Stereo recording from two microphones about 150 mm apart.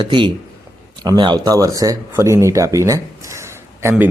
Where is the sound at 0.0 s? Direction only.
30° right (ahead or behind).